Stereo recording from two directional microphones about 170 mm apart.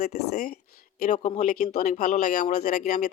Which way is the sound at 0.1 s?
45° left (ahead or behind).